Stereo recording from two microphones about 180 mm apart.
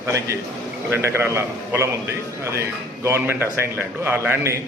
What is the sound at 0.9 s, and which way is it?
A man's voice, 15° right (ahead or behind).